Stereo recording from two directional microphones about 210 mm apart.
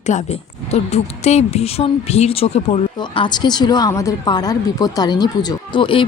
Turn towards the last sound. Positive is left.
turn(degrees=25)  # may be behind; listen again after turning